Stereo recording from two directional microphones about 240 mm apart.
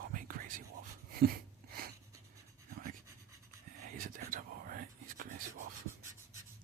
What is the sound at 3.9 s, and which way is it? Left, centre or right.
Whispering, right.